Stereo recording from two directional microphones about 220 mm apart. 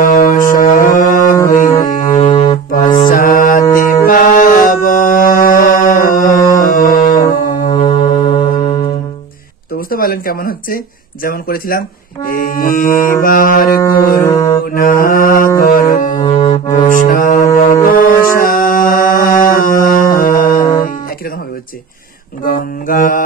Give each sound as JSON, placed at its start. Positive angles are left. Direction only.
{"t": 0.0, "sound": "music", "side_deg": 40}
{"t": 2.3, "sound": "music", "side_deg": 20}
{"t": 3.1, "sound": "mantra", "side_deg": 40}
{"t": 9.8, "sound": "a sound", "side_deg": 40}
{"t": 11.2, "sound": "mantra", "side_deg": 40}
{"t": 13.2, "sound": "music", "side_deg": 40}
{"t": 14.6, "sound": "mantra", "side_deg": 40}
{"t": 16.0, "sound": "music", "side_deg": 35}
{"t": 16.3, "sound": "brass instrument", "side_deg": 20}
{"t": 16.7, "sound": "music", "side_deg": 35}
{"t": 22.4, "sound": "mantra", "side_deg": 40}